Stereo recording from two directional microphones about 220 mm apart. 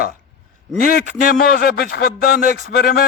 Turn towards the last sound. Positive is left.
turn(degrees=45)  # may be behind; listen again after turning